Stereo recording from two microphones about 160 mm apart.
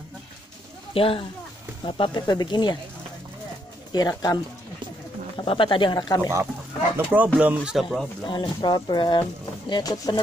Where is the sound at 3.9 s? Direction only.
25° left (ahead or behind).